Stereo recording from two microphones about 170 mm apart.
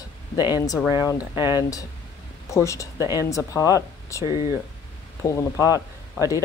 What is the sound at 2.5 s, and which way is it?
Speech, 15° left (ahead or behind).